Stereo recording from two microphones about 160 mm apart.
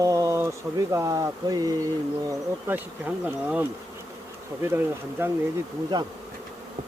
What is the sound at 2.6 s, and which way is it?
Speech, 10° right (ahead or behind).